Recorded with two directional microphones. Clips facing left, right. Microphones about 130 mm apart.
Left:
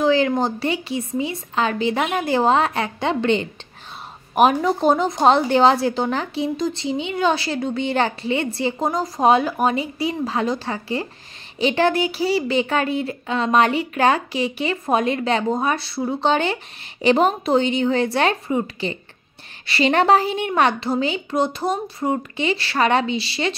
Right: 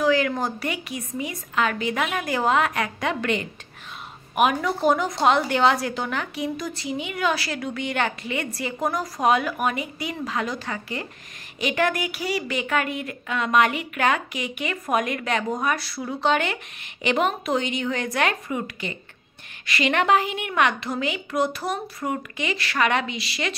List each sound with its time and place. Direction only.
0.0 s a woman's voice: 25° left (ahead or behind)